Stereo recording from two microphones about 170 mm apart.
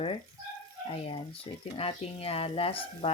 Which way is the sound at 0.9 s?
30° left (ahead or behind).